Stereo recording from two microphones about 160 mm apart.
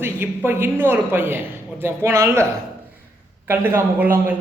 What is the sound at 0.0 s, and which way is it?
A man's voice, 15° right (ahead or behind).